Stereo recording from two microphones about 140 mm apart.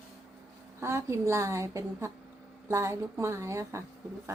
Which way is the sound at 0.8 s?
20° right (ahead or behind).